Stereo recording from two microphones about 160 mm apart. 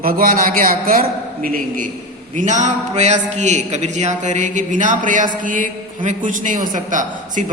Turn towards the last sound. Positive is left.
turn(degrees=-55)  # may be behind; listen again after turning